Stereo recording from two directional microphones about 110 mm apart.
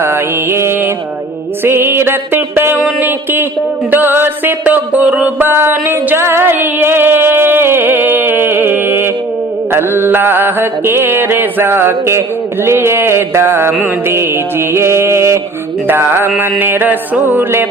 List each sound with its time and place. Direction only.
0.0 s mantra: 20° right (ahead or behind)
3.9 s music: 20° right (ahead or behind)
9.7 s mantra: 20° right (ahead or behind)
16.4 s music: 20° right (ahead or behind)